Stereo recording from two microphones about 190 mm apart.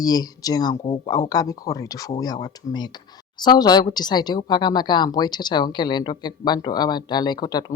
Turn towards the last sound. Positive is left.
turn(degrees=20)  # may be behind; listen again after turning